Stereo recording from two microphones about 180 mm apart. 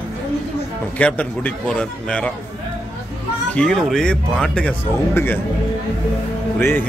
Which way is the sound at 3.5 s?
5° left (ahead or behind).